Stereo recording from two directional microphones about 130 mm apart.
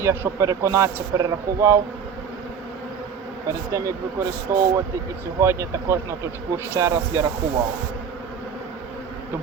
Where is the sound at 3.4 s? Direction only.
25° right (ahead or behind).